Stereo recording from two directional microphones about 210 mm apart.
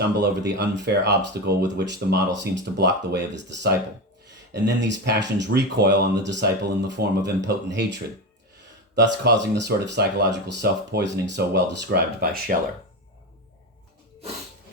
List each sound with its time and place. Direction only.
0.2 s speech: 55° right (ahead or behind)
9.2 s speech: 55° right (ahead or behind)